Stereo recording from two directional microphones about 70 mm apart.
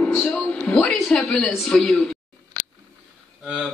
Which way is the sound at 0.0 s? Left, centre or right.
Centre.